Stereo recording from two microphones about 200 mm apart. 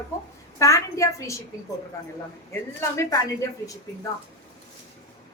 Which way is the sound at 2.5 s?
15° left (ahead or behind).